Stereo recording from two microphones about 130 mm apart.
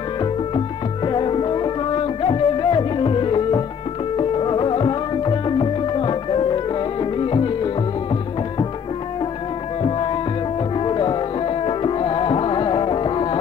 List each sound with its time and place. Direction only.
1.0 s music: 40° left (ahead or behind)
9.8 s music: 40° left (ahead or behind)